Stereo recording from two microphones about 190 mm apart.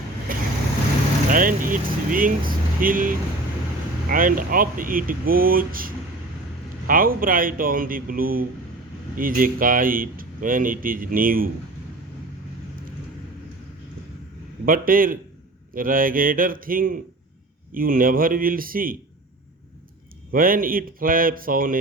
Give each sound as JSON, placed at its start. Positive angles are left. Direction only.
{"t": 0.3, "sound": "vehicle", "side_deg": -45}
{"t": 1.3, "sound": "speech", "side_deg": -45}
{"t": 14.6, "sound": "speech", "side_deg": -50}
{"t": 20.3, "sound": "speech", "side_deg": -50}